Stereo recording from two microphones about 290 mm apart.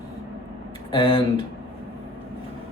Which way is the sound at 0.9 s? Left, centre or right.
Centre.